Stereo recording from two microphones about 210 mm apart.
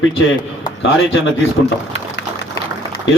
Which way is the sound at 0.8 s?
60° left (ahead or behind).